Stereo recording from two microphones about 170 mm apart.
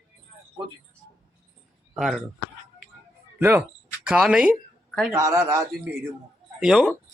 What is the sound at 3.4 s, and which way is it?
A man's voice, 10° right (ahead or behind).